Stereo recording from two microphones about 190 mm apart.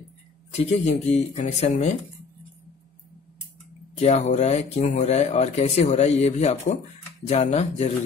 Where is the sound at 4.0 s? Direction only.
35° left (ahead or behind).